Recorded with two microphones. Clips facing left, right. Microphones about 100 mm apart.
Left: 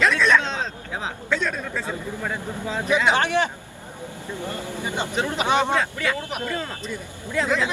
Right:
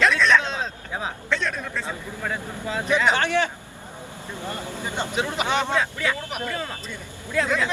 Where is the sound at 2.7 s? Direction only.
Centre (ahead or behind).